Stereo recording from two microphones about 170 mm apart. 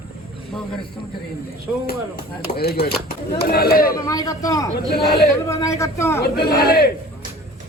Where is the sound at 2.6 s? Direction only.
65° left (ahead or behind).